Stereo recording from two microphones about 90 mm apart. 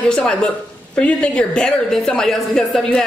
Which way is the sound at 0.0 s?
10° left (ahead or behind).